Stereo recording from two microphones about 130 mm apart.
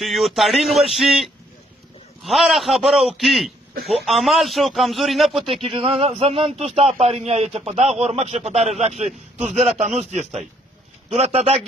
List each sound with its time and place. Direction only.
0.0 s a man's voice: centre (ahead or behind)
5.4 s a man's voice: 40° right (ahead or behind)